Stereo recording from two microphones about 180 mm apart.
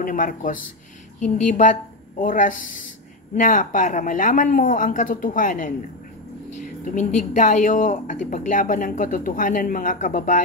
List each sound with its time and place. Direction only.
0.0 s a woman's voice: 50° left (ahead or behind)